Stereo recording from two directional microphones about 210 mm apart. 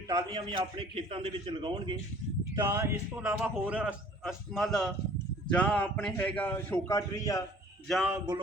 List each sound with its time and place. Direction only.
0.1 s a man's voice: 20° right (ahead or behind)
2.6 s a man's voice: 10° right (ahead or behind); by 7.4 s 15° left (ahead or behind)
7.9 s a man's voice: centre (ahead or behind)